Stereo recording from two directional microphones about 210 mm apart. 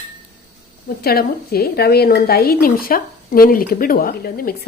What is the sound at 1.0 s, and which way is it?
A woman's voice, 45° left (ahead or behind).